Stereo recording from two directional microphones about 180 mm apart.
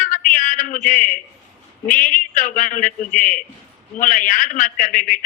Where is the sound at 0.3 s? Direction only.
45° left (ahead or behind).